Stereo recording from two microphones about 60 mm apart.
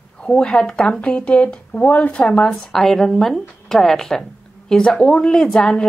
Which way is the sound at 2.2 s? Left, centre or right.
Centre.